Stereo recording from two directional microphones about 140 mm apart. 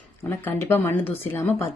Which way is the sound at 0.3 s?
15° left (ahead or behind).